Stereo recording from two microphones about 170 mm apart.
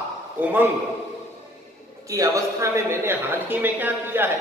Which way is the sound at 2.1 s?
20° right (ahead or behind).